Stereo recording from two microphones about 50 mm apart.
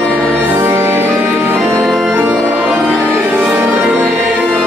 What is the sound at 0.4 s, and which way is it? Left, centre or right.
Music, right.